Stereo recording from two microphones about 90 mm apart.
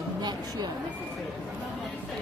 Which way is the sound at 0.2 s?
50° right (ahead or behind).